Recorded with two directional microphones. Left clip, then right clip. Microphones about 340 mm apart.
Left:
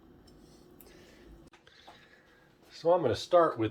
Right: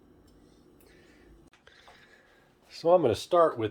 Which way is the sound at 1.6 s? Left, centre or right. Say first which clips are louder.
Right 3 dB; centre.